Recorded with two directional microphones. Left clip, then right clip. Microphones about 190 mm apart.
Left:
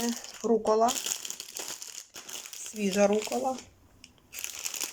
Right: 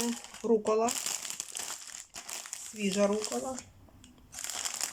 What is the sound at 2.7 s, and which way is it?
Speech, centre (ahead or behind).